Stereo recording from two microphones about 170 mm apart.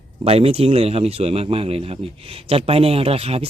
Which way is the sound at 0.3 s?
35° right (ahead or behind).